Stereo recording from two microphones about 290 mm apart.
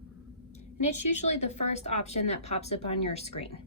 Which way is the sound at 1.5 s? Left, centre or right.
Left.